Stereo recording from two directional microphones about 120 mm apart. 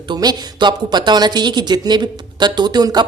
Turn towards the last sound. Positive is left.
turn(degrees=-35)  # may be behind; listen again after turning